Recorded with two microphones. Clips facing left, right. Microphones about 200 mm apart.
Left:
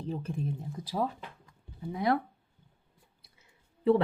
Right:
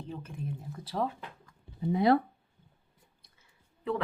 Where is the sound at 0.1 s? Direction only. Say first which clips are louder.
Left 8 dB; 35° left (ahead or behind).